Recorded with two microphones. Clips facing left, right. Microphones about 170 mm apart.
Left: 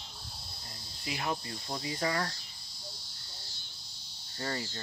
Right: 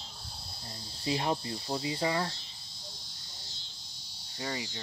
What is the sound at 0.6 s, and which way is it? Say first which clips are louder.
Speech: right 4 dB; 30° right (ahead or behind).